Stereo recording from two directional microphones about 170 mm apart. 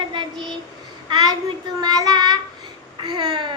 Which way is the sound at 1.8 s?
25° right (ahead or behind).